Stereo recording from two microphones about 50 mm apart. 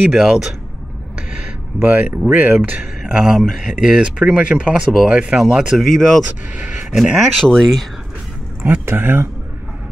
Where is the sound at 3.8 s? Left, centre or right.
Centre.